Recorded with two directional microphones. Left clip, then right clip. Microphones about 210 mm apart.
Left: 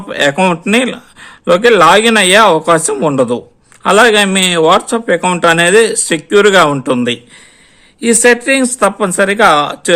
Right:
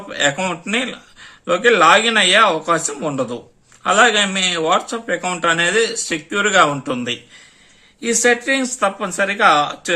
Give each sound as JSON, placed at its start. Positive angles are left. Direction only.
{"t": 0.1, "sound": "a man's voice", "side_deg": 50}